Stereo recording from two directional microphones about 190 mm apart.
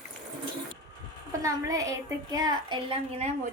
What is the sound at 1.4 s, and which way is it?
A woman's voice, 15° right (ahead or behind).